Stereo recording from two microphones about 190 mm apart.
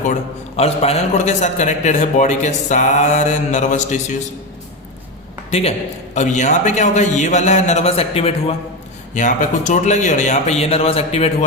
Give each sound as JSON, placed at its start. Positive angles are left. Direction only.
{"t": 0.1, "sound": "a man's voice", "side_deg": 35}
{"t": 5.5, "sound": "a man's voice", "side_deg": 35}